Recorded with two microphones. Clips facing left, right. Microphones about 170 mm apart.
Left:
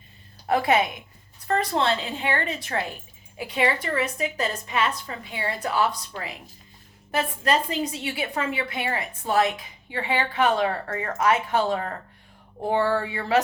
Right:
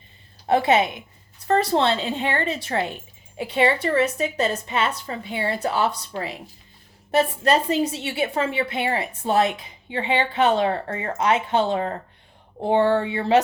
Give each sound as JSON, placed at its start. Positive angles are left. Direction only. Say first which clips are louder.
{"t": 0.4, "sound": "a woman's voice", "louder": "right 3 dB", "side_deg": -25}